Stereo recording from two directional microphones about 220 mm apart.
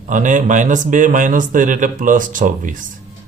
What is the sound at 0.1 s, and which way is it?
Speech, 35° right (ahead or behind).